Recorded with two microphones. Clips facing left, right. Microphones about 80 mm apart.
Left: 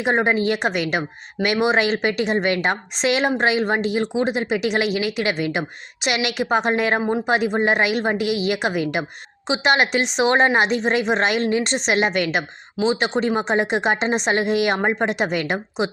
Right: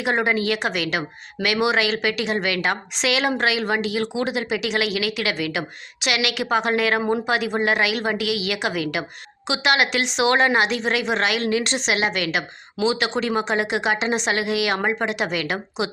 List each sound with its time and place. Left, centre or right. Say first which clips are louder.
0.0 s a woman's voice: left 2 dB; left